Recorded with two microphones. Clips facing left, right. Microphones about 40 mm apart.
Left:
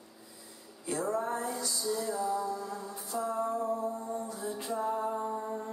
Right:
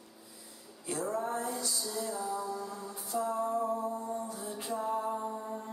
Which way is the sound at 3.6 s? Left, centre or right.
Centre.